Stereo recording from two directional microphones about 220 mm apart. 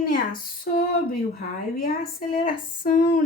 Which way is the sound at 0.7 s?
40° left (ahead or behind).